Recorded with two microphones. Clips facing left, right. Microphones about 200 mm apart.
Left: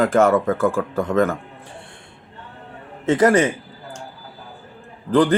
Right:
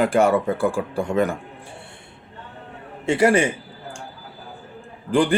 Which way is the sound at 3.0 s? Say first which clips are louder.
Left 2 dB; 15° right (ahead or behind).